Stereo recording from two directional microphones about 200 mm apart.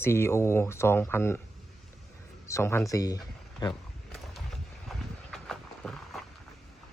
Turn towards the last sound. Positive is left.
turn(degrees=0)  # may be behind; listen again after turning